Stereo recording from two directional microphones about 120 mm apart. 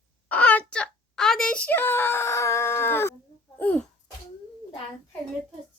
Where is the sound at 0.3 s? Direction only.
10° left (ahead or behind).